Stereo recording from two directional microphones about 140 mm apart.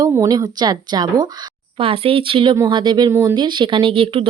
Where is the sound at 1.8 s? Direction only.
40° right (ahead or behind).